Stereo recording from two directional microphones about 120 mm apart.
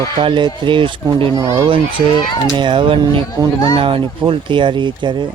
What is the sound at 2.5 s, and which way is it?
Speech, 45° right (ahead or behind).